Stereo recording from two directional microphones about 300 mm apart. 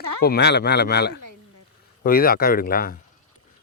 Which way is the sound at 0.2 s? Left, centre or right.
Left.